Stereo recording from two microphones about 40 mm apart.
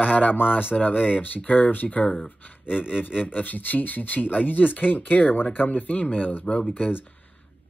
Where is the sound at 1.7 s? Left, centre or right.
Left.